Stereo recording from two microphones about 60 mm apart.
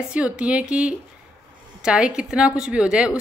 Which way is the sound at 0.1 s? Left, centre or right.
Centre.